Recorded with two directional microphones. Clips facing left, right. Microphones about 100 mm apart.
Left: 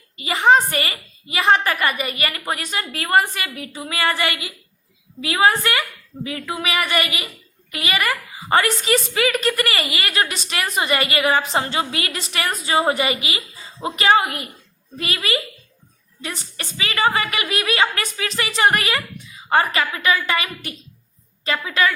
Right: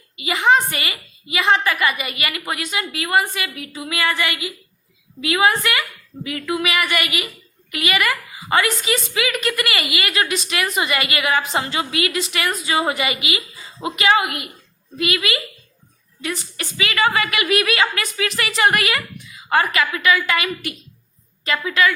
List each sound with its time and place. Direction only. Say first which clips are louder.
0.2 s a woman's voice: left 1 dB; 40° left (ahead or behind)